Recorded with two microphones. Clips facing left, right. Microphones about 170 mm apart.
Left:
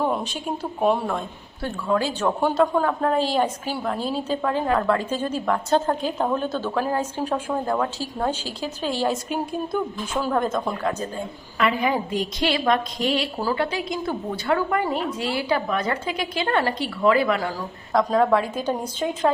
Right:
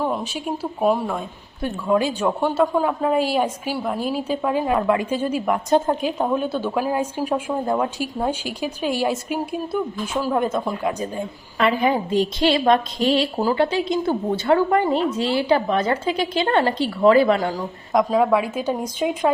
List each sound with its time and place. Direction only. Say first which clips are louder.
0.0 s speech: even; centre (ahead or behind)
1.6 s a woman's voice: right 3 dB; 15° right (ahead or behind)
11.5 s a woman's voice: right 3 dB; 30° right (ahead or behind)
18.1 s a woman's voice: left 1 dB; 10° right (ahead or behind)